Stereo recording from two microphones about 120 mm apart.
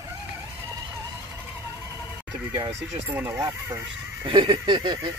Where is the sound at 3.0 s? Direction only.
20° right (ahead or behind).